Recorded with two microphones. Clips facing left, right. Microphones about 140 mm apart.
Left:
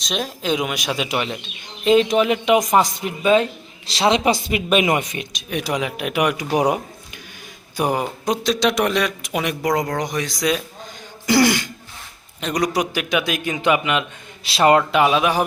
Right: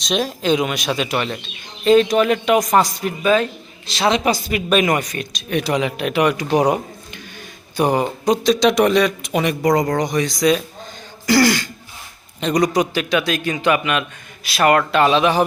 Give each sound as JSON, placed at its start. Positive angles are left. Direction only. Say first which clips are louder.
{"t": 0.0, "sound": "speech", "louder": "right 5 dB", "side_deg": 0}
{"t": 5.5, "sound": "speech", "louder": "right 4 dB", "side_deg": 10}
{"t": 11.3, "sound": "speech", "louder": "right 1 dB", "side_deg": 20}
{"t": 12.4, "sound": "speech", "louder": "right 4 dB", "side_deg": 5}